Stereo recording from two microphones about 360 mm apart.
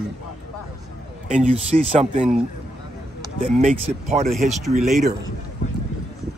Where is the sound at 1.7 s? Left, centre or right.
Right.